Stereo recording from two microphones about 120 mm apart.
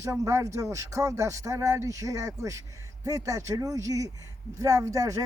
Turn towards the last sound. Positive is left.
turn(degrees=-25)  # may be behind; listen again after turning